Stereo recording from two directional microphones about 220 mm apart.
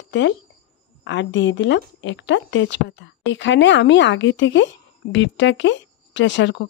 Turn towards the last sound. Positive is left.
turn(degrees=55)  # may be behind; listen again after turning